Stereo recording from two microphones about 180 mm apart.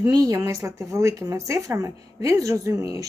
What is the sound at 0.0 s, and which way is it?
Speech, 20° right (ahead or behind).